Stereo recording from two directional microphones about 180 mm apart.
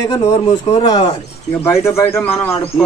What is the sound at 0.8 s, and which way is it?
Speech, 25° left (ahead or behind).